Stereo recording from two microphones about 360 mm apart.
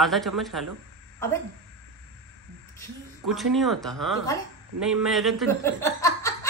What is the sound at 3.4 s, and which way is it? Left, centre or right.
A man's voice, centre.